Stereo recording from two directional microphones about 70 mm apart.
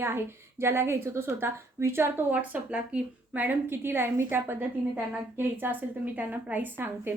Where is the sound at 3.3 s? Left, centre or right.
Right.